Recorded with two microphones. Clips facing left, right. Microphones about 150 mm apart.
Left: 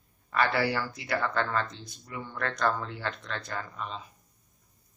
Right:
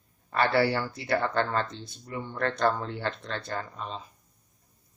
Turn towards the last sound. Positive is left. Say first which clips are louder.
# right 1 dB
turn(degrees=-35)  # may be behind; listen again after turning